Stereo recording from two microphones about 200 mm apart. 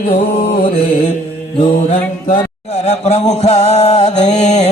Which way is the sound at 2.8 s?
35° left (ahead or behind).